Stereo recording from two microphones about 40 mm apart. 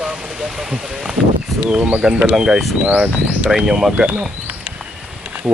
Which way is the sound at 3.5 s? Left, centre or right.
Centre.